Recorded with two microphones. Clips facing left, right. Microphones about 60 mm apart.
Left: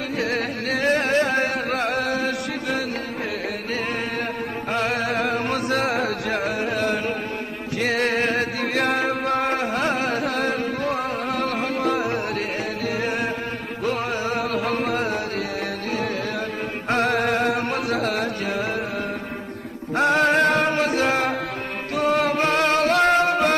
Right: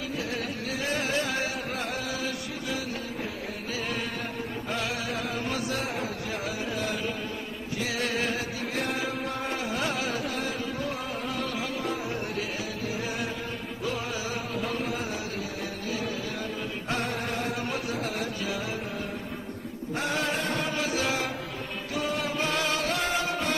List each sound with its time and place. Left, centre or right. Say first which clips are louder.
0.2 s music: left 8 dB; left
4.7 s music: left 10 dB; left
16.9 s music: left 11 dB; left
20.0 s music: left 12 dB; left
21.9 s music: left 10 dB; left